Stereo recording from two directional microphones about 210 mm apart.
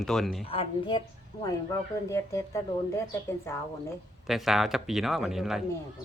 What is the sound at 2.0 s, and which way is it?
Speech, 15° left (ahead or behind).